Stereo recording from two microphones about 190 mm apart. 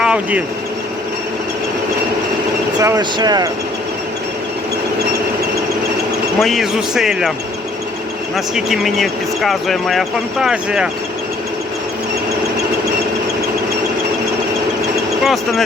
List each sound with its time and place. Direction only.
0.0 s speech: 5° right (ahead or behind)
2.7 s speech: 20° right (ahead or behind)
6.4 s speech: centre (ahead or behind)
8.5 s speech: centre (ahead or behind)
15.2 s speech: centre (ahead or behind)